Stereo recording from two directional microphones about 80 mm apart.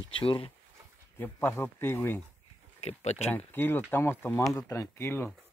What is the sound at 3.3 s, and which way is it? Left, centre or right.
Speech, left.